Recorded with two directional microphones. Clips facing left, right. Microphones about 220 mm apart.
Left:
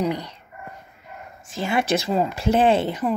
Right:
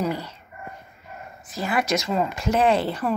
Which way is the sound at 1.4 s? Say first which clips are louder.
Left 2 dB; 25° left (ahead or behind).